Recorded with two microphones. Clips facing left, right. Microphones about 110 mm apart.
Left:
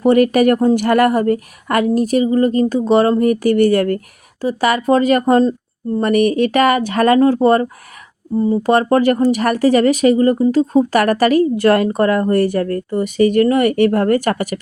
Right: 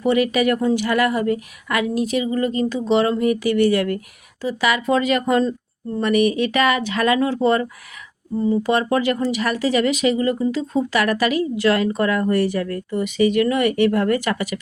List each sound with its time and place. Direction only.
0.0 s speech: 50° left (ahead or behind)